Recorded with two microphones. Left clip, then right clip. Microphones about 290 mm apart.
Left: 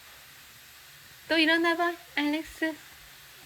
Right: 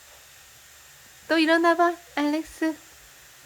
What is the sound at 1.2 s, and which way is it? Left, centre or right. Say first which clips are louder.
Speech: right 4 dB; centre.